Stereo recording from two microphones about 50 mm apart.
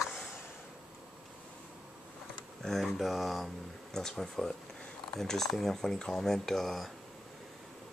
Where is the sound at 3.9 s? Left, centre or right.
Centre.